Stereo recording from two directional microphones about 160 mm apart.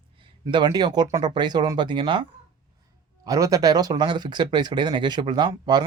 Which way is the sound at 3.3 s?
20° right (ahead or behind).